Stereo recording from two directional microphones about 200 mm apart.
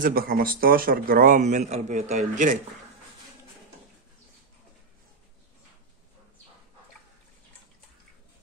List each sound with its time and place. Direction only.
0.0 s a man's voice: 50° right (ahead or behind)